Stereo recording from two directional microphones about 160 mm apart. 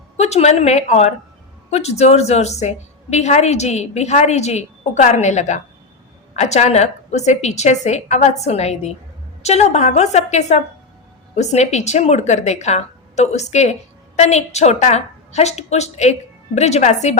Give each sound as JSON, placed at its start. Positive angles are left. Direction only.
{"t": 0.2, "sound": "a woman's voice", "side_deg": 45}